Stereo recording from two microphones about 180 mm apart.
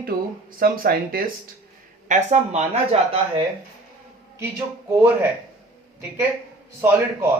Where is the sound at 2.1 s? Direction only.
40° right (ahead or behind).